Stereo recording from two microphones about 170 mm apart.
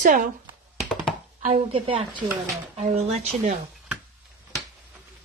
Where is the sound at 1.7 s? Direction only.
30° right (ahead or behind).